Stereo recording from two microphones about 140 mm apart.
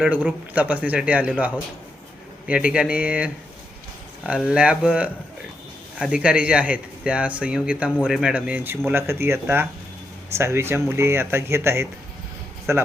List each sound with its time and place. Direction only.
0.1 s speech: 10° right (ahead or behind)